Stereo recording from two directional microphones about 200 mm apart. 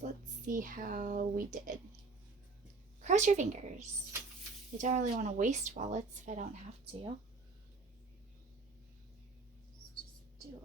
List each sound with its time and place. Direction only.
0.0 s speech: 40° right (ahead or behind)
3.0 s speech: 35° right (ahead or behind)